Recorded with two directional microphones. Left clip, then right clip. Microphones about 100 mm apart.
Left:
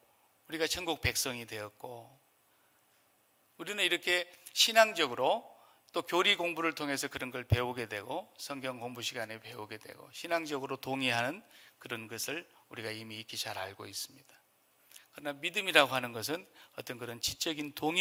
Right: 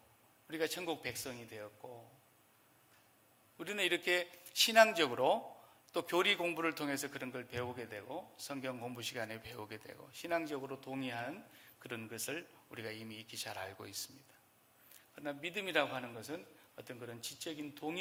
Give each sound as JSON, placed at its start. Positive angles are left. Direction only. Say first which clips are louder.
{"t": 0.4, "sound": "speech", "louder": "left 4 dB", "side_deg": 55}
{"t": 3.6, "sound": "speech", "louder": "left 4 dB", "side_deg": 50}
{"t": 5.9, "sound": "speech", "louder": "left 4 dB", "side_deg": 35}
{"t": 6.9, "sound": "speech", "louder": "left 5 dB", "side_deg": 50}
{"t": 8.4, "sound": "speech", "louder": "left 4 dB", "side_deg": 40}
{"t": 11.5, "sound": "speech", "louder": "left 5 dB", "side_deg": 35}
{"t": 15.1, "sound": "a man's voice", "louder": "left 6 dB", "side_deg": 60}